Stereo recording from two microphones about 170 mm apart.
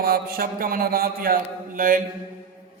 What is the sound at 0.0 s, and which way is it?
A man's voice, 60° right (ahead or behind).